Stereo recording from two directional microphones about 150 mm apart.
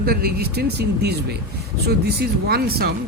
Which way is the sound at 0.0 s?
90° right.